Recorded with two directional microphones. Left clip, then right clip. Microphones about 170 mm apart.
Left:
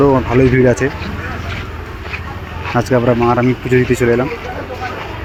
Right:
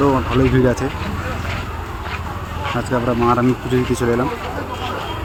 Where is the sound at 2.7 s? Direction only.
20° left (ahead or behind).